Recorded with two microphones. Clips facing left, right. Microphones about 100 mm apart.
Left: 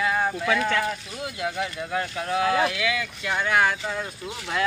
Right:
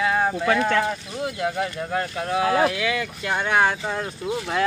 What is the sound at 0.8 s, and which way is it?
Speech, 25° right (ahead or behind).